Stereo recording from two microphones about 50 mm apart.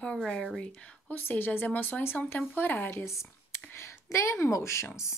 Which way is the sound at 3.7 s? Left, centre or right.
Left.